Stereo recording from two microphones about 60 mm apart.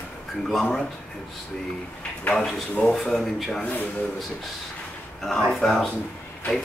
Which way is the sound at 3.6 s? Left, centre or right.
Left.